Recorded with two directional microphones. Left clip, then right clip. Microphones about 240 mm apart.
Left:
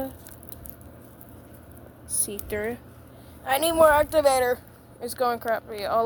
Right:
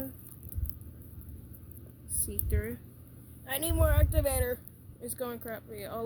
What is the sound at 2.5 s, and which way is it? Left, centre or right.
A woman's voice, centre.